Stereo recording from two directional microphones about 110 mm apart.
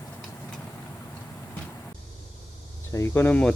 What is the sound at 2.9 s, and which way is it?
Speech, 25° left (ahead or behind).